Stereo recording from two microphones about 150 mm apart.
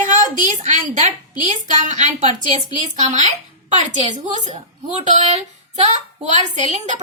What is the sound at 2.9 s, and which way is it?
A woman's voice, 50° right (ahead or behind).